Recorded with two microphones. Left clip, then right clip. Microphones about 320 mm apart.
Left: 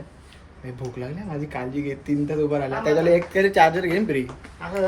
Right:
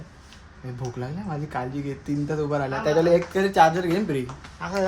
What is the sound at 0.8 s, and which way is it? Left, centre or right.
Speech, centre.